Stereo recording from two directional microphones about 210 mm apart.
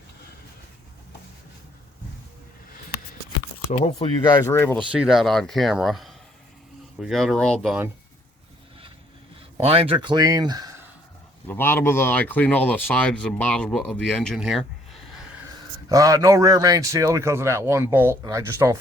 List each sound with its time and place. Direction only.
3.9 s speech: 20° left (ahead or behind)
4.9 s speech: 5° right (ahead or behind)
9.6 s speech: 25° right (ahead or behind)
11.4 s speech: 10° left (ahead or behind)
15.9 s speech: 15° right (ahead or behind)